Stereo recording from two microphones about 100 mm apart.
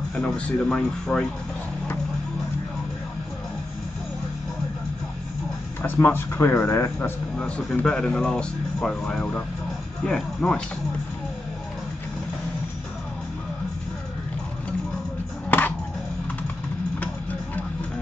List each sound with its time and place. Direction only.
0.1 s speech: 10° left (ahead or behind)
5.8 s speech: 20° left (ahead or behind)
15.5 s music: 15° left (ahead or behind)